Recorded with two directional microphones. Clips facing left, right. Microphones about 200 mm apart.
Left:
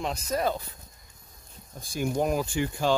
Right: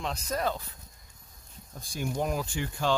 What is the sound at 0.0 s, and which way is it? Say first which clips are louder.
Speech: left 3 dB; 10° left (ahead or behind).